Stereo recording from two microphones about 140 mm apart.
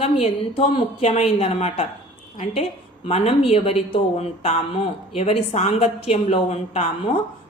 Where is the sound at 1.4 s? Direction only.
50° left (ahead or behind).